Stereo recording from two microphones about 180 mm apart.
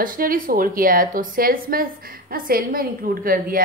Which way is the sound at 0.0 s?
50° right (ahead or behind).